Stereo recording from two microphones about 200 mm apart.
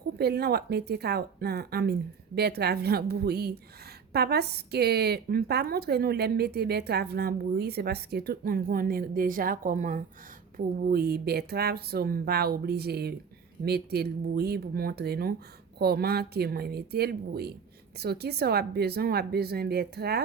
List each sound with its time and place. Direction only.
0.2 s a woman's voice: 55° right (ahead or behind)